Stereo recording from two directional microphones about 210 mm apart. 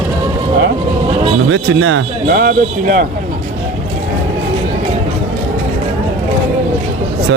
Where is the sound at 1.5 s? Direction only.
65° right (ahead or behind).